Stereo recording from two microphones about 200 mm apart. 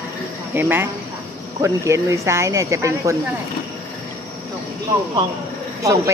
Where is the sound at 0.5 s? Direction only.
10° right (ahead or behind).